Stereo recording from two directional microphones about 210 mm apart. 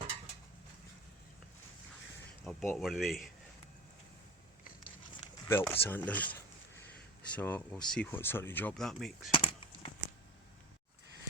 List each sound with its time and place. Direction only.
2.4 s speech: centre (ahead or behind)
5.5 s speech: 10° left (ahead or behind)
9.3 s a sound: 25° left (ahead or behind)